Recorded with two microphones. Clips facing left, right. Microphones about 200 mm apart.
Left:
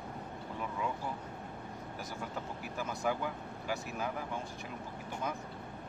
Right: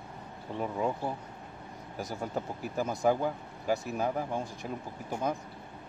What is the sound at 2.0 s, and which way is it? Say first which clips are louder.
Speech: right 8 dB; 40° right (ahead or behind).